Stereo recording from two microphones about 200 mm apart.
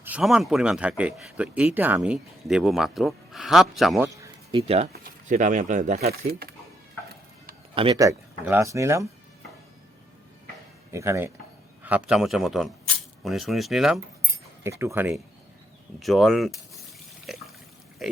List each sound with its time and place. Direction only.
0.0 s speech: 5° right (ahead or behind)
4.5 s speech: 30° right (ahead or behind)
4.9 s speech: 45° right (ahead or behind)
7.8 s speech: 20° right (ahead or behind)
10.9 s speech: 15° right (ahead or behind)
14.6 s speech: 15° right (ahead or behind)
17.2 s water: centre (ahead or behind)
18.0 s burping: centre (ahead or behind)